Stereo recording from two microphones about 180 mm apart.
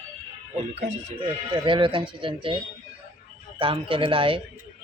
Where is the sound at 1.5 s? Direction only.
25° right (ahead or behind).